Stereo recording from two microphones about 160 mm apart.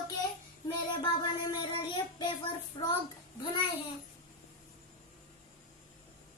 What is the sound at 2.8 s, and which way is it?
Speech, 30° left (ahead or behind).